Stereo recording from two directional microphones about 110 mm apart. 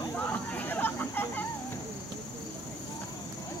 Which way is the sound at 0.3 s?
15° left (ahead or behind).